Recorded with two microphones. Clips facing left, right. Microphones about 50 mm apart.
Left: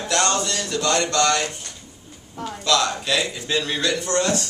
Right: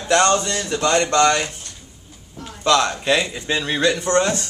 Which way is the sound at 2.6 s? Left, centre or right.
Right.